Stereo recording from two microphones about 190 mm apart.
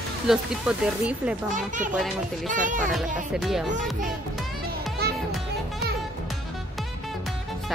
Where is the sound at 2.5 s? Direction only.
45° right (ahead or behind).